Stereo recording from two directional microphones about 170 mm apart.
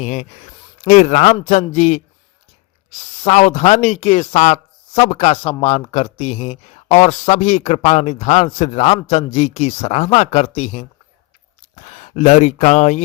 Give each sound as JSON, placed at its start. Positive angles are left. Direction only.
{"t": 0.0, "sound": "a man's voice", "side_deg": 40}
{"t": 3.0, "sound": "speech", "side_deg": 40}